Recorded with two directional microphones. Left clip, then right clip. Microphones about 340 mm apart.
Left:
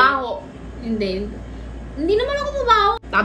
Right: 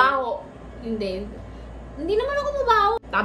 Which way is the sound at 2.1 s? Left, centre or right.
Centre.